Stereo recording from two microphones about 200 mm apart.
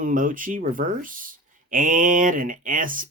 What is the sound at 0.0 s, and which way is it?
Speech, 40° right (ahead or behind).